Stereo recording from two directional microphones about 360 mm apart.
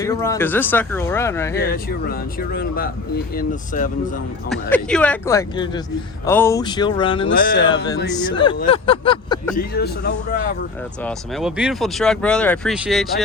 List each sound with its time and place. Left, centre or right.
0.0 s speech: centre
1.6 s speech: left
4.4 s speech: centre
8.6 s a sound: centre
9.6 s speech: left
11.0 s speech: centre